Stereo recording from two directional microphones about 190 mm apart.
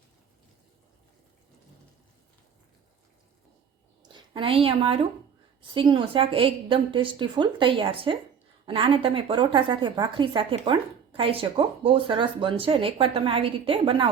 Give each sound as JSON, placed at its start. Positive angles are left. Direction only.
{"t": 4.1, "sound": "a woman's voice", "side_deg": -25}